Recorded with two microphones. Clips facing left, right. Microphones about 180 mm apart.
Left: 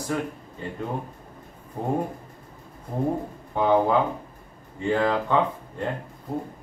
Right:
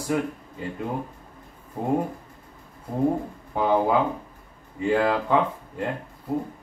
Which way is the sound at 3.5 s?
5° right (ahead or behind).